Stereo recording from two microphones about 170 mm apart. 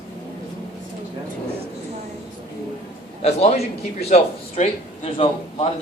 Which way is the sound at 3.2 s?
40° left (ahead or behind).